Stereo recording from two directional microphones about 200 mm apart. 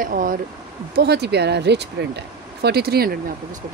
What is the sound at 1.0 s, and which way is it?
Speech, 55° right (ahead or behind).